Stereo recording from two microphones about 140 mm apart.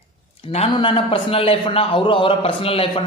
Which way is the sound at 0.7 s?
40° left (ahead or behind).